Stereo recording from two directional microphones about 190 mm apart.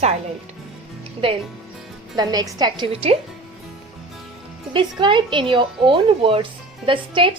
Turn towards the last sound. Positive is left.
turn(degrees=-25)  # may be behind; listen again after turning